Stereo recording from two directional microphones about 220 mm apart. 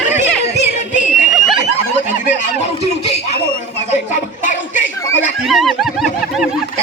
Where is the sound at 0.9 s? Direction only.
35° left (ahead or behind).